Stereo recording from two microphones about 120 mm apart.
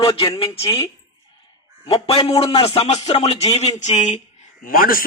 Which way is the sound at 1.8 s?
55° left (ahead or behind).